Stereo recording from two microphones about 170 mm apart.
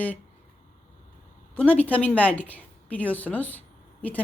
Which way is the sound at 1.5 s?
5° left (ahead or behind).